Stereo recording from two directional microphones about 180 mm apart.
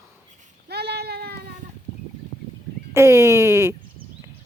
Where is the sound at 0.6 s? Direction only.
65° right (ahead or behind).